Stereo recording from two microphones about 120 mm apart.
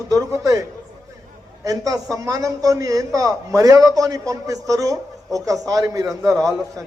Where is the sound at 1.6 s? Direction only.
30° right (ahead or behind).